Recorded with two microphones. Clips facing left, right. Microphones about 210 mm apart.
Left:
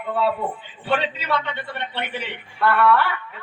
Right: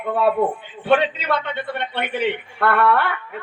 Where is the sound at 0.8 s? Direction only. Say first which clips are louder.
Right 6 dB; 55° right (ahead or behind).